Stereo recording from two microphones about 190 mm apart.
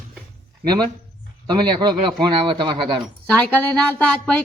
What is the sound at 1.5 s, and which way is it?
Speech, 25° right (ahead or behind).